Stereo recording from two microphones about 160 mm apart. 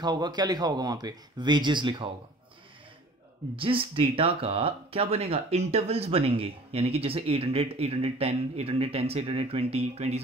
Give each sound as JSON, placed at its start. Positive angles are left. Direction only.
{"t": 0.0, "sound": "speech", "side_deg": -25}
{"t": 3.5, "sound": "speech", "side_deg": -35}